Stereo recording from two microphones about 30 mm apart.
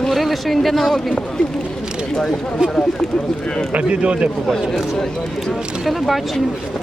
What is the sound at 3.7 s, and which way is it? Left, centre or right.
Speech, right.